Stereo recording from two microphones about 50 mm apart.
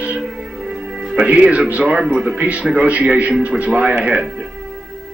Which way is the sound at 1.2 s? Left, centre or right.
Right.